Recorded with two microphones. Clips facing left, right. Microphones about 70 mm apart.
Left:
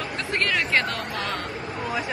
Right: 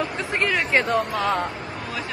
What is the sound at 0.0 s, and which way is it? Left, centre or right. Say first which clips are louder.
Speech: right 2 dB; centre.